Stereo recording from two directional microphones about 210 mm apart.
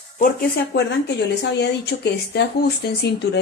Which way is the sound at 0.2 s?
50° left (ahead or behind).